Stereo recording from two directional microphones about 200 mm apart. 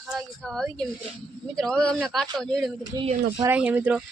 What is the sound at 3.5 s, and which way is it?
Speech, 10° right (ahead or behind).